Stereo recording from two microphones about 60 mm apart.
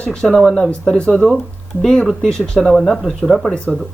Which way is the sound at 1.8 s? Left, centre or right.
Centre.